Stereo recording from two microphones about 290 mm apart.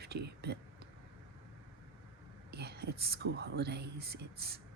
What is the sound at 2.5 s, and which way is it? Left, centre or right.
Speech, right.